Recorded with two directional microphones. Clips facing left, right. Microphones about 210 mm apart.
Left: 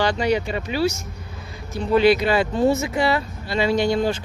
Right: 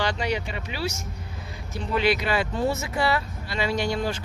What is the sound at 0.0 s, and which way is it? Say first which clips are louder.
Speech: left 6 dB; 40° left (ahead or behind).